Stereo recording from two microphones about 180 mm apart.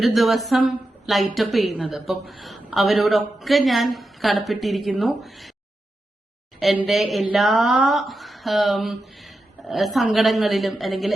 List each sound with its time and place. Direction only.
0.0 s a woman's voice: centre (ahead or behind)
6.6 s a woman's voice: centre (ahead or behind)